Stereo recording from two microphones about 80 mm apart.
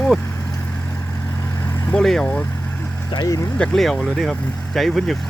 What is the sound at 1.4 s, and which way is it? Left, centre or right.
Vehicle, left.